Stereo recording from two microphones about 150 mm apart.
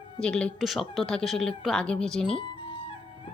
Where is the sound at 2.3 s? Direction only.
35° left (ahead or behind).